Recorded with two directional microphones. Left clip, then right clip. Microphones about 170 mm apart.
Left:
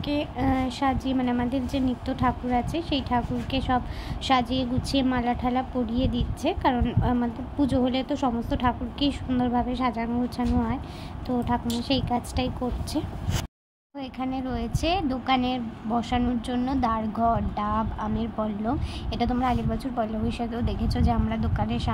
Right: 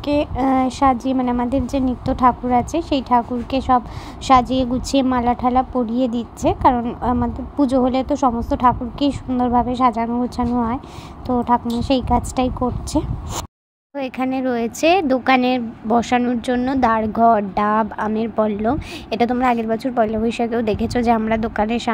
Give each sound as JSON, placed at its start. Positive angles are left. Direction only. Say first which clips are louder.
{"t": 0.0, "sound": "a woman's voice", "louder": "right 9 dB", "side_deg": -35}
{"t": 13.9, "sound": "speech", "louder": "right 9 dB", "side_deg": -40}